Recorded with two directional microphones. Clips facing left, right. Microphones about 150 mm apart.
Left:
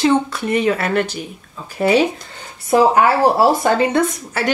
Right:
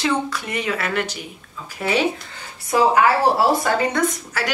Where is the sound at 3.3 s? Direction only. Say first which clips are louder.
Left 4 dB; 25° left (ahead or behind).